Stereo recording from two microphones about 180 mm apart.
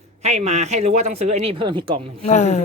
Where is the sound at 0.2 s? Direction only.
35° right (ahead or behind).